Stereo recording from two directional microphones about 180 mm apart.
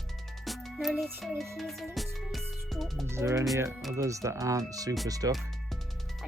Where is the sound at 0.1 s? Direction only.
Centre (ahead or behind).